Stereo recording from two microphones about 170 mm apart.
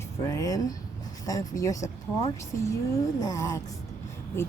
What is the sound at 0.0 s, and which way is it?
A woman's voice, 20° left (ahead or behind).